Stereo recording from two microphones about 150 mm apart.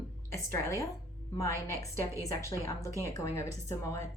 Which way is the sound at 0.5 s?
20° left (ahead or behind).